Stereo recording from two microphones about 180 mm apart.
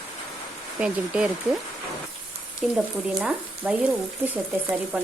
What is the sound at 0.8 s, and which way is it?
Speech, 5° right (ahead or behind).